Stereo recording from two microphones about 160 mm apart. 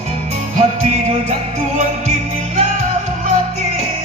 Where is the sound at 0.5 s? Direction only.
40° right (ahead or behind).